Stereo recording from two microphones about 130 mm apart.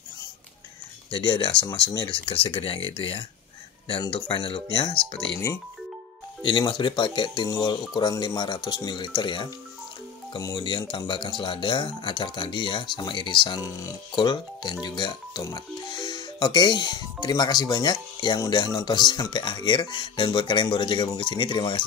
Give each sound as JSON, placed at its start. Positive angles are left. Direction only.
{"t": 1.1, "sound": "speech", "side_deg": 35}
{"t": 4.3, "sound": "speech", "side_deg": 40}
{"t": 6.4, "sound": "speech", "side_deg": 35}